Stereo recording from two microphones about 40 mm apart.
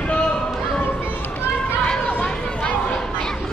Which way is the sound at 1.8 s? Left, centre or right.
Left.